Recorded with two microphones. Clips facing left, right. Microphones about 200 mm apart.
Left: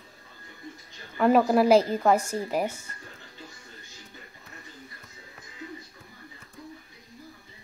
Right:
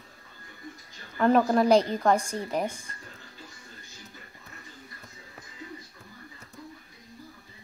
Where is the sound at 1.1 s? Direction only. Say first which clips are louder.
Left 1 dB; 5° left (ahead or behind).